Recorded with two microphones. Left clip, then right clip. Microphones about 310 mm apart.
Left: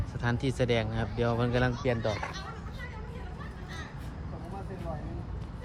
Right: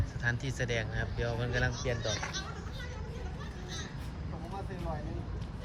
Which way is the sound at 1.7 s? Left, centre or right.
Left.